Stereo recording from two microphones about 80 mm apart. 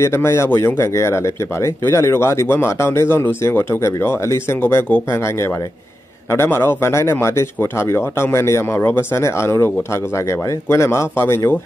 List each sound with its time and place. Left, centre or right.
0.0 s speech: left
6.3 s speech: left
10.7 s speech: left